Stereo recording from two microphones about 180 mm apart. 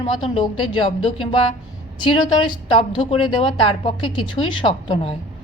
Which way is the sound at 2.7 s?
30° left (ahead or behind).